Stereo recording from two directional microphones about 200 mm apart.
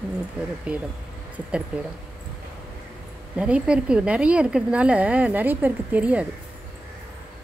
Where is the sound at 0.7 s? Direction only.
5° right (ahead or behind).